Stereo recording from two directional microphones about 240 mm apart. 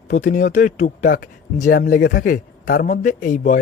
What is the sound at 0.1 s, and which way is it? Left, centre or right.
Speech, left.